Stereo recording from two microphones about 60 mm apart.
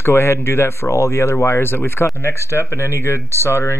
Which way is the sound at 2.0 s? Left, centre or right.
Left.